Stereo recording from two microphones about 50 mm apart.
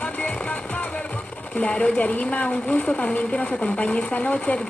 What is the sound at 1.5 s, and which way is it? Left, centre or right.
Speech, left.